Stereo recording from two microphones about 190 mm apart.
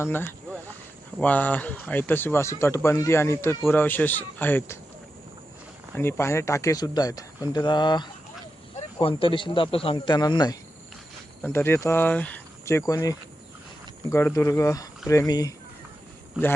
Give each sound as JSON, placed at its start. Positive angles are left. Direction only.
{"t": 0.0, "sound": "speech", "side_deg": 10}
{"t": 5.9, "sound": "speech", "side_deg": 10}